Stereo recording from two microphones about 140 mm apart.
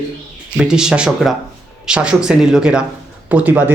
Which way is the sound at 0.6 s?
5° right (ahead or behind).